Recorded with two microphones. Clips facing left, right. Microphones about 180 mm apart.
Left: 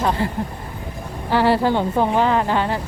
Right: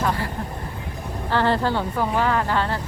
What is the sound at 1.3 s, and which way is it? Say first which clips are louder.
A woman's voice: left 4 dB; 10° left (ahead or behind).